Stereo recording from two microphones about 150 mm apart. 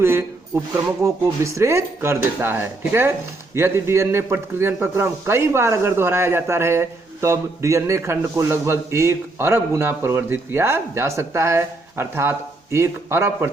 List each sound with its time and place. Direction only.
0.0 s speech: 15° right (ahead or behind)